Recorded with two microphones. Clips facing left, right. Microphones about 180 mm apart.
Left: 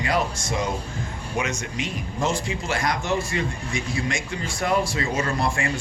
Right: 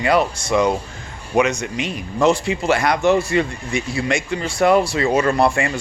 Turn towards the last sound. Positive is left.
turn(degrees=-70)  # may be behind; listen again after turning